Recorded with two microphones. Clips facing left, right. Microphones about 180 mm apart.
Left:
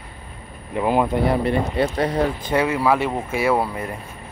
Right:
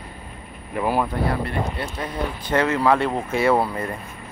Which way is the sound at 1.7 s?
85° left.